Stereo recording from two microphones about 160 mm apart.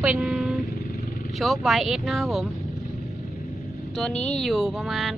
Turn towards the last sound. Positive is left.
turn(degrees=0)  # may be behind; listen again after turning